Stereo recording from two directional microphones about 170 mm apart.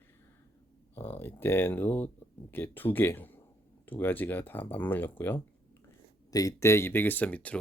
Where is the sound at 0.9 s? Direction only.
10° left (ahead or behind).